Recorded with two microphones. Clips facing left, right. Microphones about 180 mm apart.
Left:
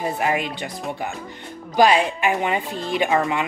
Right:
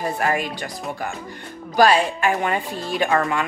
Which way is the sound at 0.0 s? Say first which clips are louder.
Even; 15° left (ahead or behind).